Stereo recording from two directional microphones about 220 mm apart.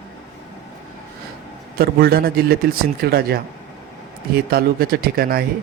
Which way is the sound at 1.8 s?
45° right (ahead or behind).